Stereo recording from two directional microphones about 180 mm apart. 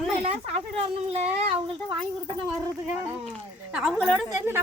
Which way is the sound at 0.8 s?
35° right (ahead or behind).